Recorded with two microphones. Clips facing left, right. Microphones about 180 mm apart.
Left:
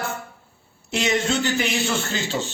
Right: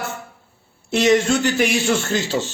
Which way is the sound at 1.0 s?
45° right (ahead or behind).